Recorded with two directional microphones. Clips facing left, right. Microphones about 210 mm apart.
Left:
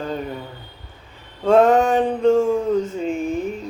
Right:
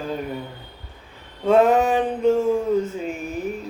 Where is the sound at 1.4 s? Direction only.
5° right (ahead or behind).